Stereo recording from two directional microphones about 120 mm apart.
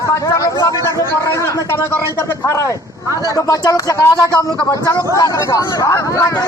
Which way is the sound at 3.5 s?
30° left (ahead or behind).